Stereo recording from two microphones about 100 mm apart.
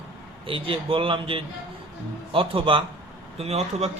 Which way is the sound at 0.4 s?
65° right (ahead or behind).